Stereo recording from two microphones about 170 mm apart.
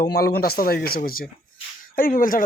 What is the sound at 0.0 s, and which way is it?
Speech, 70° left (ahead or behind).